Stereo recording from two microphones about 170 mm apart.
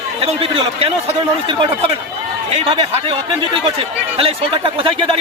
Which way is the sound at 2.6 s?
30° right (ahead or behind).